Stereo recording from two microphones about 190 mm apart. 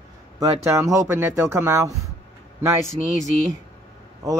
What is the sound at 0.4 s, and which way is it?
Speech, 15° right (ahead or behind).